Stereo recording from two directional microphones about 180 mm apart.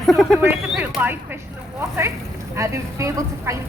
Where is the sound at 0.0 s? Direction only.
Centre (ahead or behind).